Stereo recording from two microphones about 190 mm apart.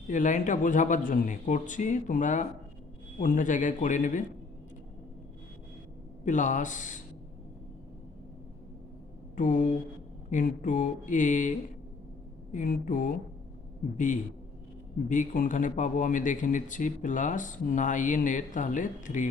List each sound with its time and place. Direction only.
0.1 s speech: 40° left (ahead or behind)
6.2 s speech: 40° left (ahead or behind)
9.3 s speech: 45° left (ahead or behind)